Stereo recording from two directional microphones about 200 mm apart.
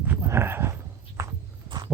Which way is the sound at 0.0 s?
10° right (ahead or behind).